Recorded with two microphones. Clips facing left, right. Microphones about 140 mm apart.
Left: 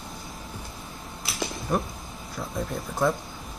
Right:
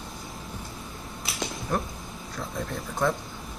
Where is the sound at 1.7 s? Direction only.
5° left (ahead or behind).